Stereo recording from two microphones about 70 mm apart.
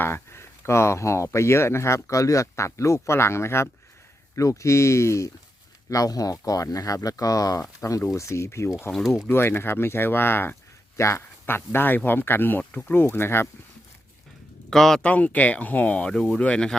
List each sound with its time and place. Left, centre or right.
0.0 s speech: left
5.9 s speech: left
10.9 s speech: left
14.7 s speech: centre
15.0 s speech: left